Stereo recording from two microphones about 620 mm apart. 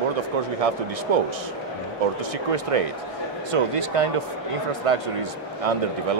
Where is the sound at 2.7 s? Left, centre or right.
Right.